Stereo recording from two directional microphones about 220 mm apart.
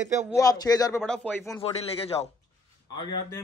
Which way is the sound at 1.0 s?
5° left (ahead or behind).